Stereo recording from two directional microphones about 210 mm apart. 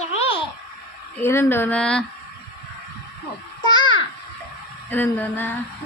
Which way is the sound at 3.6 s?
20° left (ahead or behind).